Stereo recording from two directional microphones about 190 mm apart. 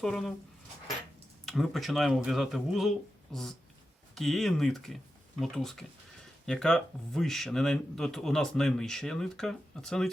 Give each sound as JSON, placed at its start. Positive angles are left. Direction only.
{"t": 0.0, "sound": "speech", "side_deg": 0}
{"t": 1.5, "sound": "speech", "side_deg": 0}